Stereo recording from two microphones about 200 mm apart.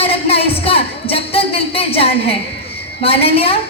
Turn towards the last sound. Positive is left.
turn(degrees=30)  # may be behind; listen again after turning